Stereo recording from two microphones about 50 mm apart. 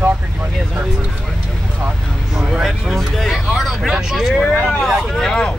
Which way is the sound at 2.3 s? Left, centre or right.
Centre.